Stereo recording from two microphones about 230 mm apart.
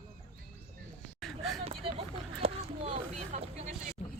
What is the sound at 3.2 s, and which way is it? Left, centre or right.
Vehicle, right.